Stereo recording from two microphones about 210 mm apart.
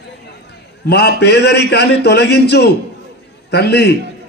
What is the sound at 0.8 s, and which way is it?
A man's voice, 50° left (ahead or behind).